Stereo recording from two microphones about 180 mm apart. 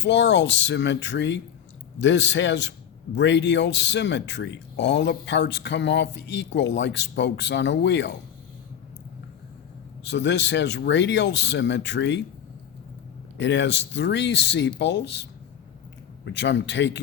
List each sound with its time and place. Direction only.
0.0 s speech: 75° left (ahead or behind)
10.0 s speech: 75° left (ahead or behind)
13.3 s speech: 90° left